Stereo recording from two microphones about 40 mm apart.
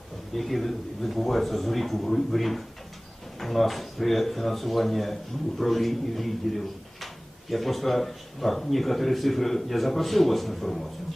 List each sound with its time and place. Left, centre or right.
0.3 s a man's voice: centre